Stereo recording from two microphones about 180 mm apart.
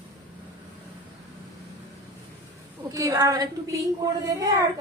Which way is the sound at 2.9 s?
20° right (ahead or behind).